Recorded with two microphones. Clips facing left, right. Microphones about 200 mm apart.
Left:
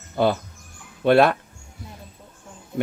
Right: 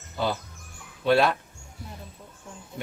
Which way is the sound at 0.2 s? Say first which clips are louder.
Left 7 dB; 55° left (ahead or behind).